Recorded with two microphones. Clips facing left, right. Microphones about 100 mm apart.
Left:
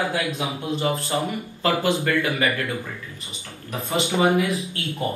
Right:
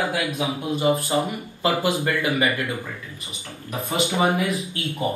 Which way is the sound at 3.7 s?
20° right (ahead or behind).